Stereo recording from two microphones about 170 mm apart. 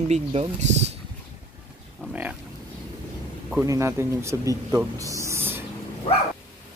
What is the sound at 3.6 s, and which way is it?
Speech, 15° right (ahead or behind).